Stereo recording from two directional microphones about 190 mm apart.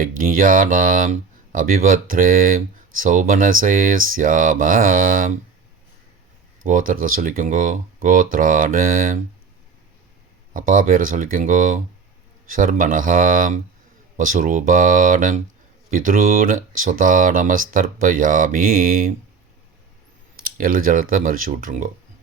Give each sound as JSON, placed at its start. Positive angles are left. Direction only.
{"t": 0.2, "sound": "speech", "side_deg": -45}
{"t": 6.7, "sound": "speech", "side_deg": -45}
{"t": 10.5, "sound": "speech", "side_deg": -45}
{"t": 20.4, "sound": "speech", "side_deg": -50}